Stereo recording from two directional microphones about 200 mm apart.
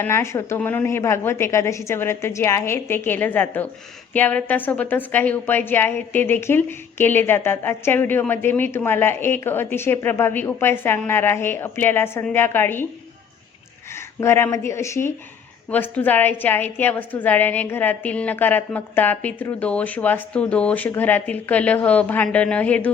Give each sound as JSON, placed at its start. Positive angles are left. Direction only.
{"t": 0.0, "sound": "a woman's voice", "side_deg": 15}
{"t": 14.2, "sound": "a woman's voice", "side_deg": 15}